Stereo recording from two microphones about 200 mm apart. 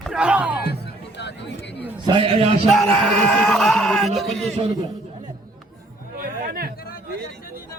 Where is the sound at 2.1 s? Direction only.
25° right (ahead or behind).